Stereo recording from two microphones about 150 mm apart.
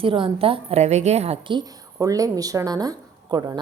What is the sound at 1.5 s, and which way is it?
A woman's voice, 20° right (ahead or behind).